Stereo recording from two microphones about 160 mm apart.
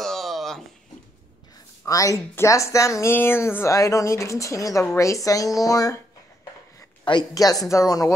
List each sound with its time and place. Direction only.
0.0 s a sound: centre (ahead or behind)
1.9 s speech: 20° left (ahead or behind)
7.1 s speech: 25° left (ahead or behind)